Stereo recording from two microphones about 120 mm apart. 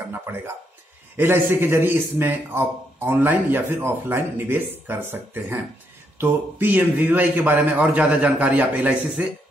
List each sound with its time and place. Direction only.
1.1 s a man's voice: 20° right (ahead or behind)